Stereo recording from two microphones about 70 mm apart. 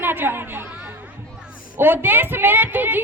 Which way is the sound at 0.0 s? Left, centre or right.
Right.